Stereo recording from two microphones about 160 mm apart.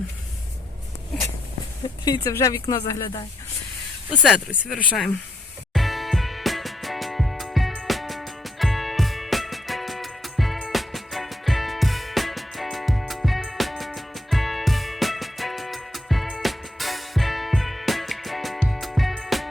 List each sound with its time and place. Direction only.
2.0 s speech: 25° left (ahead or behind)
4.1 s speech: centre (ahead or behind)
5.7 s music: centre (ahead or behind)